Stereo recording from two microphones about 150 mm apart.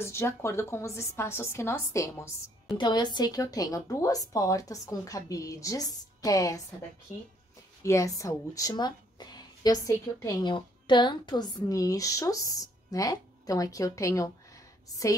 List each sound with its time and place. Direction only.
0.0 s a woman's voice: 15° left (ahead or behind)
2.8 s a woman's voice: 30° left (ahead or behind)
7.8 s a woman's voice: 20° left (ahead or behind)